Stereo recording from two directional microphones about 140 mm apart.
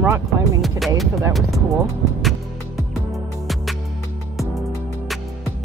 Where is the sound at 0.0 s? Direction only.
20° right (ahead or behind).